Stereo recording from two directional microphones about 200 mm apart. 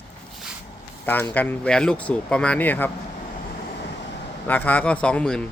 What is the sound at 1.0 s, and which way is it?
A man's voice, 10° left (ahead or behind).